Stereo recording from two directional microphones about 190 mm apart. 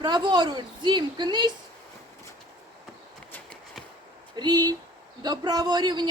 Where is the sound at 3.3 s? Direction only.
10° left (ahead or behind).